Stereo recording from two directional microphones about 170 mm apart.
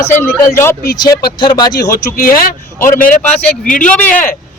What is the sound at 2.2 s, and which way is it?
Speech, 55° left (ahead or behind).